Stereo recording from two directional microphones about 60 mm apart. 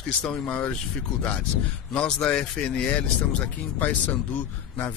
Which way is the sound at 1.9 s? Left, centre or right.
Centre.